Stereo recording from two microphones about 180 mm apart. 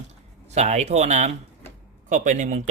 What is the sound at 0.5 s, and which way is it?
Speech, 40° right (ahead or behind).